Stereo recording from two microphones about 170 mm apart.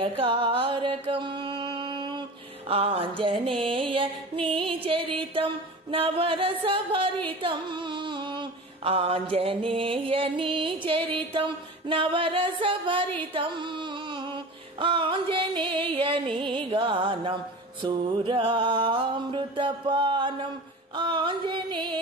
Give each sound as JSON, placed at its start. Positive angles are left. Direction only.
{"t": 0.0, "sound": "music", "side_deg": -35}